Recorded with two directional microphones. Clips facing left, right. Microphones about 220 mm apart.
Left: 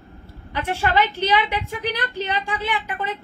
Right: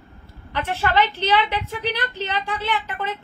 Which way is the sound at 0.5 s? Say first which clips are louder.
Even; 10° left (ahead or behind).